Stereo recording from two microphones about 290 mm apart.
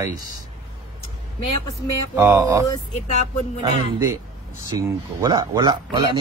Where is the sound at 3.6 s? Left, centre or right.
Centre.